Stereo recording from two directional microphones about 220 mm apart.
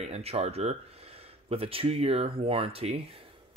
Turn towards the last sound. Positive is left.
turn(degrees=-25)  # may be behind; listen again after turning